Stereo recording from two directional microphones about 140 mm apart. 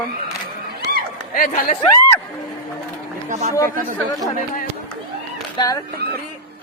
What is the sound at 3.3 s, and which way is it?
Speech, 60° right (ahead or behind).